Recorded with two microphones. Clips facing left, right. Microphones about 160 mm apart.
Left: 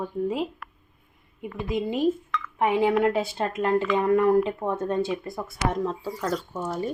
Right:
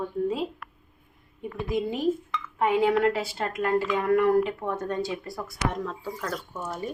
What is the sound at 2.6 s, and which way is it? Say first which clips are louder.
Speech: left 1 dB; 15° left (ahead or behind).